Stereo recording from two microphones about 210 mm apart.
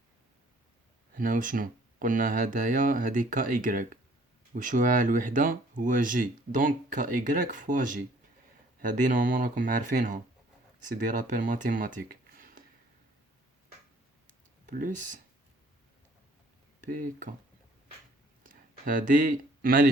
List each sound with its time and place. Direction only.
1.1 s speech: 40° right (ahead or behind)
14.7 s speech: 40° right (ahead or behind)
16.8 s speech: 40° right (ahead or behind)
18.4 s speech: 40° right (ahead or behind)